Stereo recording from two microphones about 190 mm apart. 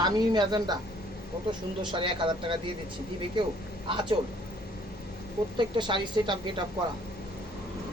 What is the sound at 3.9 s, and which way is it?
Speech, 25° right (ahead or behind).